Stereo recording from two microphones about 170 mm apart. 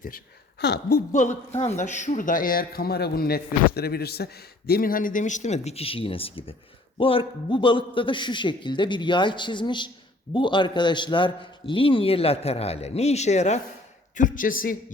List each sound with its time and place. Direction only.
0.6 s a woman's voice: 70° left (ahead or behind)